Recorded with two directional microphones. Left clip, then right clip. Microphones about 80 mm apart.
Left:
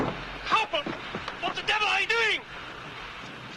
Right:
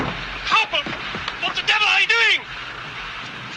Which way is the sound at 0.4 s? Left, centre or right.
Right.